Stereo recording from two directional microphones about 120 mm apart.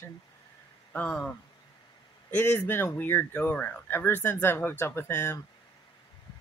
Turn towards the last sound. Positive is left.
turn(degrees=20)  # may be behind; listen again after turning